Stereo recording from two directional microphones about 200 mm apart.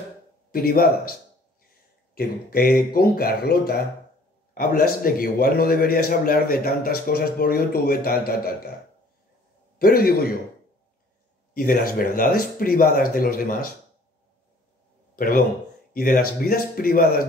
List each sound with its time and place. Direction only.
0.5 s a man's voice: 50° left (ahead or behind)
2.1 s a man's voice: 50° left (ahead or behind)
9.8 s a man's voice: 50° left (ahead or behind)
11.5 s a man's voice: 45° left (ahead or behind)
15.1 s a man's voice: 45° left (ahead or behind)